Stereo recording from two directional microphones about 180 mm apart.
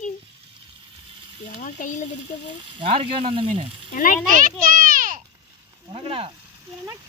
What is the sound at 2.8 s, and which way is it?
Speech, 30° right (ahead or behind).